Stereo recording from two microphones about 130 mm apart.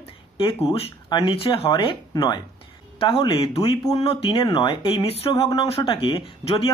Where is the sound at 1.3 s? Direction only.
45° left (ahead or behind).